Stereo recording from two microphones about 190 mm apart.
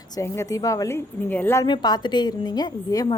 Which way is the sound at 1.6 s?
25° left (ahead or behind).